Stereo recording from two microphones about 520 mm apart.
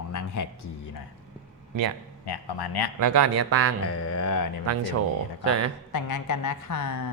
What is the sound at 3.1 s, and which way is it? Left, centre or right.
Speech, right.